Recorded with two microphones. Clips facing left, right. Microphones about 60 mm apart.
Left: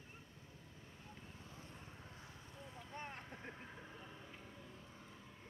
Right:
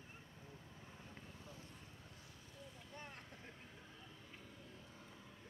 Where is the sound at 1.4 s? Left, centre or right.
Left.